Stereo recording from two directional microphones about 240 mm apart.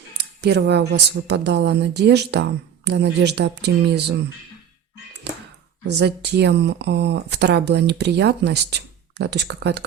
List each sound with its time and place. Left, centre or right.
0.2 s speech: right
6.0 s speech: right